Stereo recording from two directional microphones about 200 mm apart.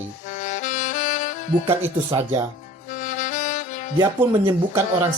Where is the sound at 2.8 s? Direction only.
40° left (ahead or behind).